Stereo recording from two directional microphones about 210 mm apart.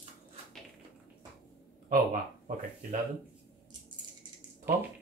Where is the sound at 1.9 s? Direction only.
40° right (ahead or behind).